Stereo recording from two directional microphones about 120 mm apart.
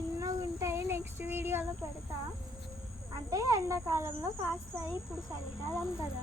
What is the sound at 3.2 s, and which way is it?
Speech, 25° right (ahead or behind).